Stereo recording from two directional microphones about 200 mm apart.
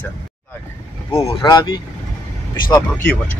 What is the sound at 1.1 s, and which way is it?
Speech, 20° left (ahead or behind).